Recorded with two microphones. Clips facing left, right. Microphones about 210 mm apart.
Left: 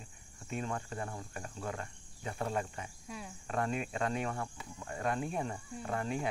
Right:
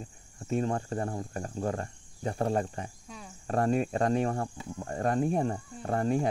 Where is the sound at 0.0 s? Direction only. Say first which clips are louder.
Right 9 dB; 40° right (ahead or behind).